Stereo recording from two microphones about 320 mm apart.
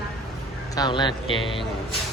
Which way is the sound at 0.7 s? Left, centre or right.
Centre.